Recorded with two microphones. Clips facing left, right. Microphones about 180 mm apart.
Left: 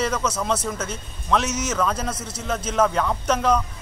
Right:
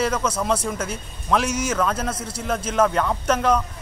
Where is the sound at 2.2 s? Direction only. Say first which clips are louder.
Right 3 dB; 30° right (ahead or behind).